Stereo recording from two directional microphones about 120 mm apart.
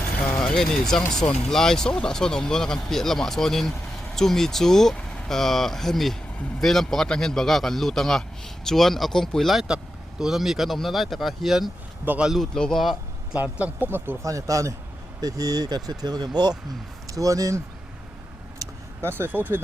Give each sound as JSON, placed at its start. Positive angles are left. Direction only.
{"t": 0.3, "sound": "vehicle", "side_deg": 15}
{"t": 0.5, "sound": "speech", "side_deg": 5}
{"t": 12.0, "sound": "speech", "side_deg": -10}
{"t": 12.3, "sound": "speech", "side_deg": 5}
{"t": 13.3, "sound": "speech", "side_deg": -15}
{"t": 18.6, "sound": "speech", "side_deg": -20}